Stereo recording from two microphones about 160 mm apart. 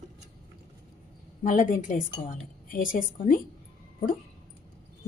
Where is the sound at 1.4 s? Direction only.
55° left (ahead or behind).